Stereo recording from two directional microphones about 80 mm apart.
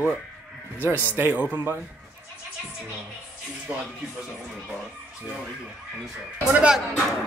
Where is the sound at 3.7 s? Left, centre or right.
Centre.